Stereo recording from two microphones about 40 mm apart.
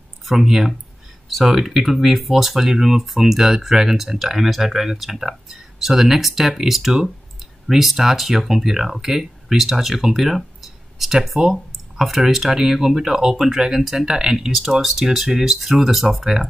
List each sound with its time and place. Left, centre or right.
0.2 s speech: centre